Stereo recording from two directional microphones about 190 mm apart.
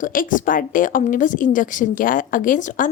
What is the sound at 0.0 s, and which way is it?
A woman's voice, 45° left (ahead or behind).